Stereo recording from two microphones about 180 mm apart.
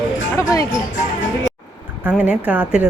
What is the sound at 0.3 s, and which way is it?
Speech, 20° left (ahead or behind).